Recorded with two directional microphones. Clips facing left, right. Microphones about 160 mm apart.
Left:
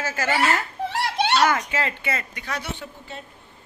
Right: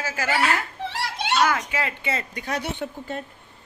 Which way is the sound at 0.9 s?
70° left (ahead or behind).